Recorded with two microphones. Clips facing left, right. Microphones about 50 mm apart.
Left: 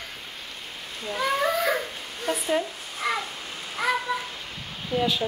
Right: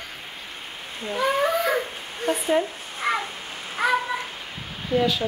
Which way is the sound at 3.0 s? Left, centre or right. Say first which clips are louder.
Right 3 dB; right.